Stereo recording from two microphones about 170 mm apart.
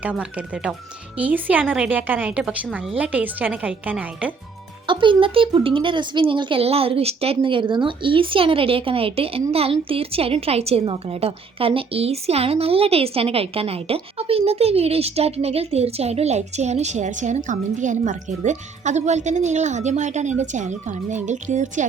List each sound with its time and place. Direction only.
0.0 s a woman's voice: 5° right (ahead or behind)
4.9 s speech: 30° right (ahead or behind); by 21.8 s 45° right (ahead or behind)